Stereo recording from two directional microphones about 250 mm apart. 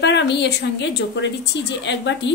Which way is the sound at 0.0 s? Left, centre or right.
Left.